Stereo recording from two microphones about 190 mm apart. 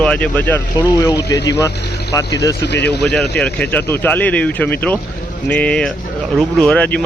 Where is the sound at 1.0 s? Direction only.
20° left (ahead or behind).